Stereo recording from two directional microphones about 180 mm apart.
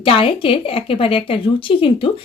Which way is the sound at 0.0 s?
30° left (ahead or behind).